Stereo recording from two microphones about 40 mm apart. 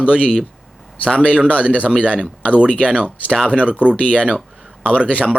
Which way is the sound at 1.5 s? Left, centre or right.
Left.